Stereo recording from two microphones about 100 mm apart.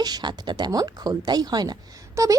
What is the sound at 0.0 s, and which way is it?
A woman's voice, 45° right (ahead or behind).